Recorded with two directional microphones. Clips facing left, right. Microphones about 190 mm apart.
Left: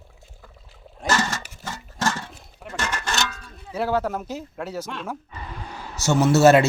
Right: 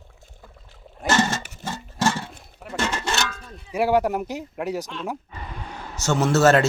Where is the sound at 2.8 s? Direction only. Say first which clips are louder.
Right 3 dB; 25° right (ahead or behind).